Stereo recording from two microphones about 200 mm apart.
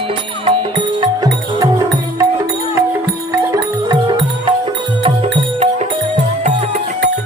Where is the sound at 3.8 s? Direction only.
25° right (ahead or behind).